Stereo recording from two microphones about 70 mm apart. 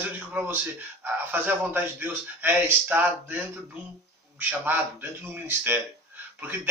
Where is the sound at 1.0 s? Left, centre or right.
Right.